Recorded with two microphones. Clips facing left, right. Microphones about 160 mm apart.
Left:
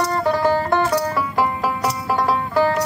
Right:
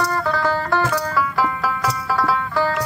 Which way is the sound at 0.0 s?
20° left (ahead or behind).